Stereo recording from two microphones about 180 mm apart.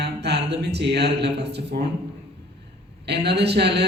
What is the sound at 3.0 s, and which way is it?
Speech, 65° right (ahead or behind).